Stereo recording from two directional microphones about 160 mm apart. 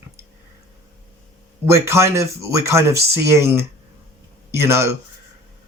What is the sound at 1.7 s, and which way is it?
Speech, 15° right (ahead or behind).